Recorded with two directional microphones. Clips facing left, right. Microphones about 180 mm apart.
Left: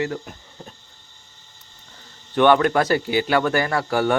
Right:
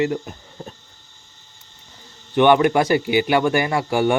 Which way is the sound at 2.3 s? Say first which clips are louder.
Right 2 dB; 15° right (ahead or behind).